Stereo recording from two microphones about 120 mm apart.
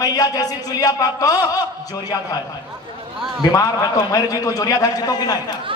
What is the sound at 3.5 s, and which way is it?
A man's voice, 30° left (ahead or behind).